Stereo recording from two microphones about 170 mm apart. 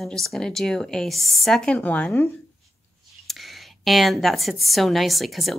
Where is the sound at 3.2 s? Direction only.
Centre (ahead or behind).